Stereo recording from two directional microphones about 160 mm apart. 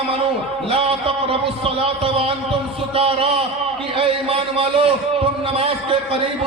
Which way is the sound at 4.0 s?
35° right (ahead or behind).